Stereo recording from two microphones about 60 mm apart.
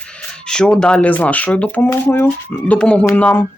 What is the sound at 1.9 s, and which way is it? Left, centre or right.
Speech, left.